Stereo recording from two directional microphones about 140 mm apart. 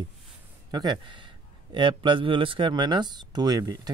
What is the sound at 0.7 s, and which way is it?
A man's voice, 30° right (ahead or behind).